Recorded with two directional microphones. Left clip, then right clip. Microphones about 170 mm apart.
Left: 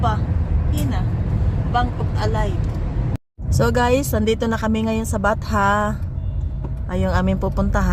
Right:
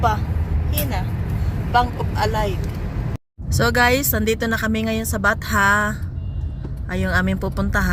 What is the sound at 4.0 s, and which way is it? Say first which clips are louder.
Speech: left 1 dB; 30° right (ahead or behind).